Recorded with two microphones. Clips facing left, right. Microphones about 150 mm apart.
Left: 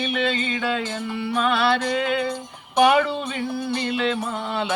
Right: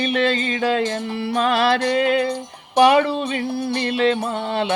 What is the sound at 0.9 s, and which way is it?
Music, 35° right (ahead or behind).